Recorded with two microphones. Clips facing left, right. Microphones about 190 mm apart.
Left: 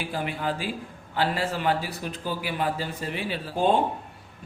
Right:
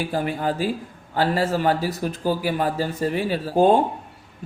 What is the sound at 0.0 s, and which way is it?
Speech, 40° right (ahead or behind).